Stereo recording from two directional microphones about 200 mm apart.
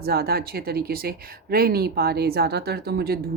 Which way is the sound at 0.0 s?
50° right (ahead or behind).